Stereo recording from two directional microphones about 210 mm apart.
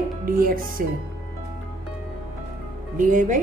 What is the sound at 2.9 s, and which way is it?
Speech, 40° right (ahead or behind).